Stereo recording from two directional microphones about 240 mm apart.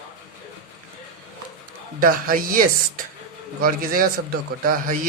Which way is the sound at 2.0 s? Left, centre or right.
Right.